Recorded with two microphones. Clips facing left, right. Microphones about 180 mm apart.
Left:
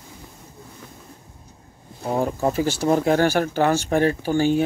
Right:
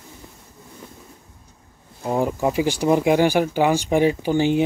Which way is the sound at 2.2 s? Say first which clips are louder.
Right 1 dB; 15° right (ahead or behind).